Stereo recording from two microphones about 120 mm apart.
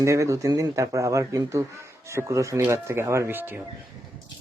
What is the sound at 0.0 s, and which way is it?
Speech, 25° right (ahead or behind).